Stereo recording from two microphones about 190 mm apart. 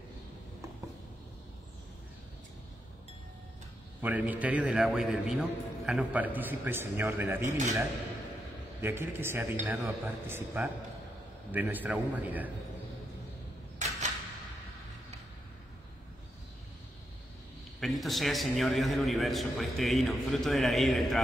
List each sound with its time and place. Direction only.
4.0 s a man's voice: 10° right (ahead or behind)
8.8 s a man's voice: 10° right (ahead or behind)
13.7 s a sound: 40° right (ahead or behind)
17.7 s a man's voice: centre (ahead or behind)